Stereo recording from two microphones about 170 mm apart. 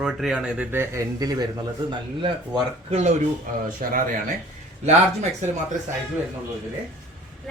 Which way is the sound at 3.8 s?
60° right (ahead or behind).